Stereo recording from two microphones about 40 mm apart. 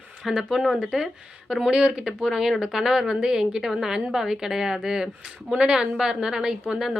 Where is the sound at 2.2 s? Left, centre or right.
Centre.